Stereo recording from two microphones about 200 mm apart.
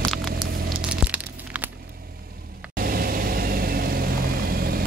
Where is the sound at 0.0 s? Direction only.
Centre (ahead or behind).